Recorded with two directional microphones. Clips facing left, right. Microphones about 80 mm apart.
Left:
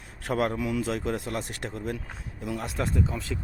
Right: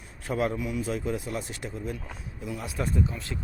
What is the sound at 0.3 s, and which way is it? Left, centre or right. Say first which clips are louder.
Speech: left 2 dB; left.